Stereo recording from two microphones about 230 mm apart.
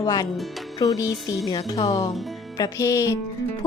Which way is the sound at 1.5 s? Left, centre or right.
Centre.